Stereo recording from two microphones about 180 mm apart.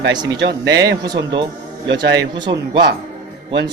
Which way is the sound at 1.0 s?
20° right (ahead or behind).